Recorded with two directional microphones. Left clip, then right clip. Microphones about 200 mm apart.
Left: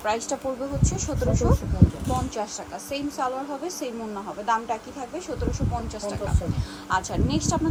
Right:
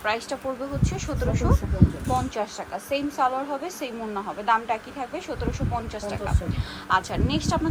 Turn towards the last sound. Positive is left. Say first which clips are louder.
# even
turn(degrees=15)  # may be behind; listen again after turning